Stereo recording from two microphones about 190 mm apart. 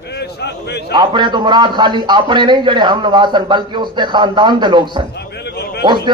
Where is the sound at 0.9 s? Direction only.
25° right (ahead or behind).